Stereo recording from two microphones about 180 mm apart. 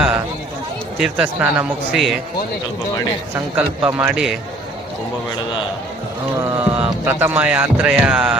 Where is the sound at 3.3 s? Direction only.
10° right (ahead or behind).